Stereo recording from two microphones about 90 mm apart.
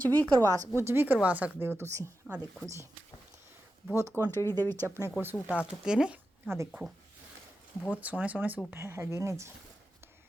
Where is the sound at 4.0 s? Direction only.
30° right (ahead or behind).